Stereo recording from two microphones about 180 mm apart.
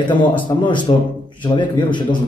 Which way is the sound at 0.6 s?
25° left (ahead or behind).